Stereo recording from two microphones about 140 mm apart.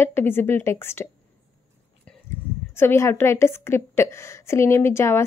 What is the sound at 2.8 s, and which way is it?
A woman's voice, 15° left (ahead or behind).